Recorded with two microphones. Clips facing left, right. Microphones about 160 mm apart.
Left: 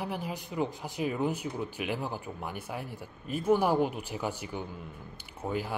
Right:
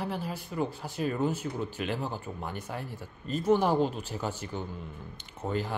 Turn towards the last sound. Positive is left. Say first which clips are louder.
# right 1 dB
turn(degrees=10)  # may be behind; listen again after turning